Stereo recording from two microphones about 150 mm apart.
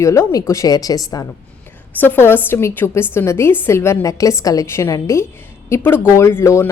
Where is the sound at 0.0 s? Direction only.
20° left (ahead or behind).